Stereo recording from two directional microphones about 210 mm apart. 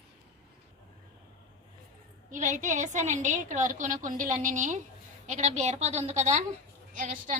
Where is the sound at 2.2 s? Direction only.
35° right (ahead or behind).